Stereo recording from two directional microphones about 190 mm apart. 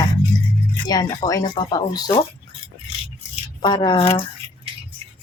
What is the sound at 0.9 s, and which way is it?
Speech, 20° left (ahead or behind).